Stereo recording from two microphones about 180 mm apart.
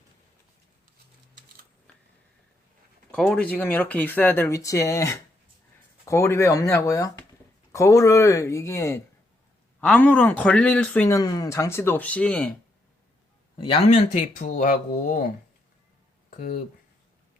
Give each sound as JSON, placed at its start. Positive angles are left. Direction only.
{"t": 3.1, "sound": "speech", "side_deg": 5}
{"t": 11.2, "sound": "speech", "side_deg": 20}
{"t": 13.7, "sound": "speech", "side_deg": 35}